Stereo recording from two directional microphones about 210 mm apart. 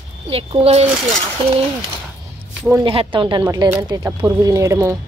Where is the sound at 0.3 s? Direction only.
25° right (ahead or behind).